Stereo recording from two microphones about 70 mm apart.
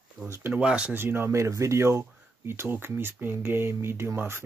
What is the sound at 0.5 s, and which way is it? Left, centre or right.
Speech, centre.